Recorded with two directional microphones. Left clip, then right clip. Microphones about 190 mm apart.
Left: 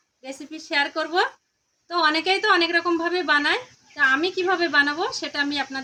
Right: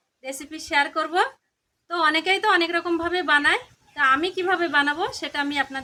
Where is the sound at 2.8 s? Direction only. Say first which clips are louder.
Left 2 dB; 10° right (ahead or behind).